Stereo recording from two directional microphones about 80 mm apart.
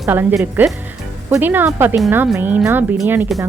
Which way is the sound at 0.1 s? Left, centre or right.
Right.